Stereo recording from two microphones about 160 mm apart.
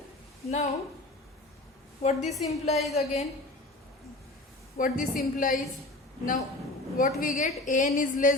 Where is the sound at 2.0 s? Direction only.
45° left (ahead or behind).